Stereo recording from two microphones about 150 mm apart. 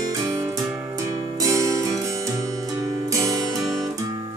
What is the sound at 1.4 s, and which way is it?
Music, 20° right (ahead or behind).